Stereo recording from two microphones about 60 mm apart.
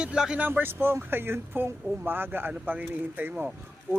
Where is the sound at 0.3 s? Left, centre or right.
Right.